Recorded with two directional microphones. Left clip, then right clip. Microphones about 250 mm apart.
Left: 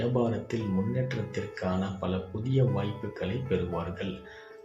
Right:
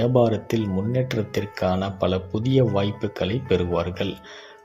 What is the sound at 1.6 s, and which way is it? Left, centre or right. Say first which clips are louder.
Speech: right 11 dB; right.